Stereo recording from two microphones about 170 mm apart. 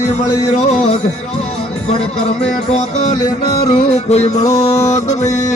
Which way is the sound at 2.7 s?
45° left (ahead or behind).